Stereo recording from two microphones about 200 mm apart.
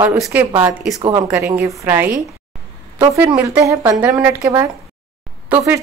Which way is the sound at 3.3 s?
10° right (ahead or behind).